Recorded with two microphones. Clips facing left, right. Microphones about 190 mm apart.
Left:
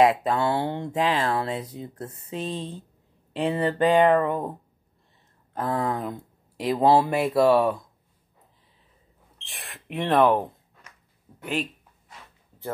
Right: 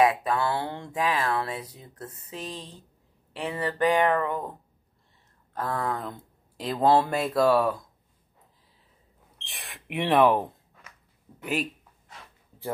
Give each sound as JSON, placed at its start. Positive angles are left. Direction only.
{"t": 0.0, "sound": "speech", "side_deg": 25}
{"t": 5.5, "sound": "speech", "side_deg": 20}
{"t": 9.4, "sound": "speech", "side_deg": 0}